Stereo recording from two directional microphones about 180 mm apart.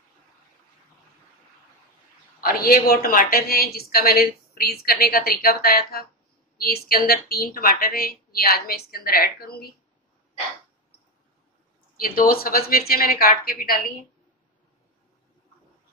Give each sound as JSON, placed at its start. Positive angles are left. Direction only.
{"t": 2.4, "sound": "a woman's voice", "side_deg": 55}
{"t": 12.2, "sound": "a woman's voice", "side_deg": 55}